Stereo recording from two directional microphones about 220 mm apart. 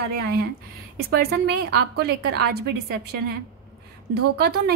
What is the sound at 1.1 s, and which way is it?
A woman's voice, 50° right (ahead or behind).